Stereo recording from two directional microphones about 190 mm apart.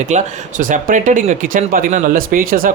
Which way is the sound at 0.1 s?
40° right (ahead or behind).